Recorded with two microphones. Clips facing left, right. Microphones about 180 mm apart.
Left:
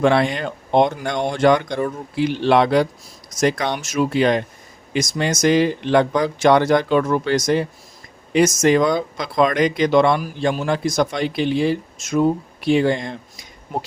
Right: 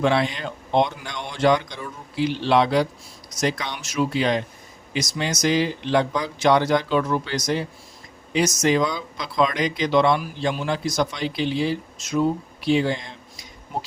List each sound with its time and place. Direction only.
0.0 s speech: 55° left (ahead or behind)